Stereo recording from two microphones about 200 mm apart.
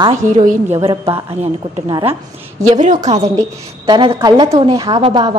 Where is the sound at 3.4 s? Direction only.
25° right (ahead or behind).